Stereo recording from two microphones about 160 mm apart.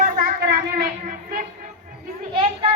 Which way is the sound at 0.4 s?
70° right (ahead or behind).